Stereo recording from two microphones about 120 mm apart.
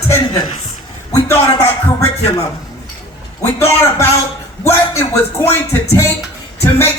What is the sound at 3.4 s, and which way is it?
Music, 25° left (ahead or behind).